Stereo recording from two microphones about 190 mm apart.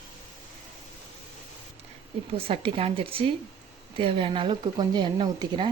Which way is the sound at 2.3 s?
30° right (ahead or behind).